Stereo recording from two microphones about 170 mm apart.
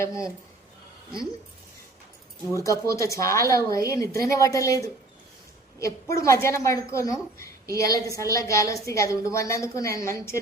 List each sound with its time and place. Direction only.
0.1 s speech: 5° right (ahead or behind)
2.6 s a woman's voice: 20° left (ahead or behind)